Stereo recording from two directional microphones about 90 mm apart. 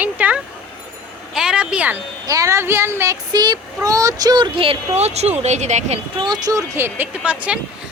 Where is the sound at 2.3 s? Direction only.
35° right (ahead or behind).